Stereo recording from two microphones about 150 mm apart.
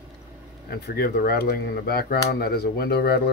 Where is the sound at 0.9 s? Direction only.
90° left.